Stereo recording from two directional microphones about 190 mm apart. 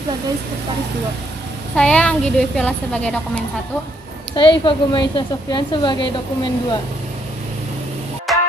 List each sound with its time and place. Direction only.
1.8 s a woman's voice: 5° left (ahead or behind)
4.3 s a woman's voice: 25° left (ahead or behind)
8.3 s music: centre (ahead or behind)